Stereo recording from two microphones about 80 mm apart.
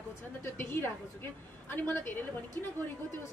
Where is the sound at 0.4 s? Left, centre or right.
Left.